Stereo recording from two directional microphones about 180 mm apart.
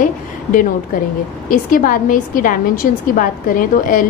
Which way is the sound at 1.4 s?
50° left (ahead or behind).